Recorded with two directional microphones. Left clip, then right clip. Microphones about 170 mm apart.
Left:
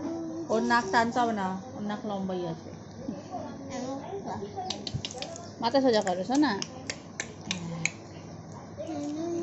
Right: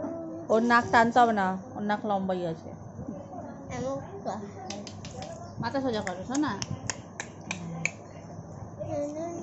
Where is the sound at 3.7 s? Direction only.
60° right (ahead or behind).